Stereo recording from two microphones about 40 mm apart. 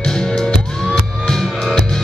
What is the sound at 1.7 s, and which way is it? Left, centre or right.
Music, centre.